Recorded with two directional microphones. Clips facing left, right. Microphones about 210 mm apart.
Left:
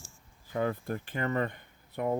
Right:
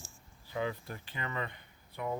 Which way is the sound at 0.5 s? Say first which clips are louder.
Left 5 dB; 50° left (ahead or behind).